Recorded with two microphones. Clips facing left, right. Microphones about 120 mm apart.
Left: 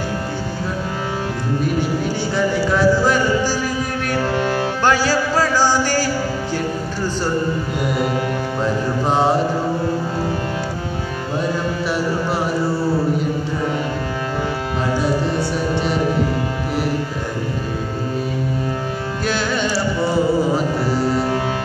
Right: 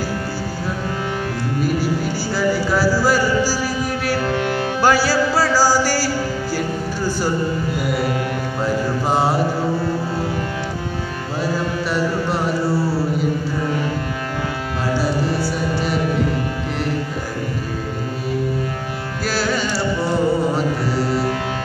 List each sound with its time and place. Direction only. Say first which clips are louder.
2.3 s music: even; 5° right (ahead or behind)
4.4 s music: left 1 dB; 25° left (ahead or behind)
4.8 s a sound: right 2 dB; 10° right (ahead or behind)
9.1 s mantra: left 2 dB; 5° right (ahead or behind)
15.7 s music: left 1 dB; 5° right (ahead or behind)
19.2 s music: even; centre (ahead or behind)